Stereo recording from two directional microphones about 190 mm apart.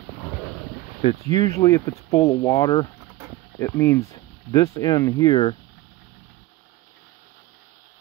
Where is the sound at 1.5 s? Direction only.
15° left (ahead or behind).